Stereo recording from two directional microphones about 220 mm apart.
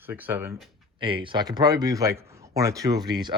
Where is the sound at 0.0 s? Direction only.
10° right (ahead or behind).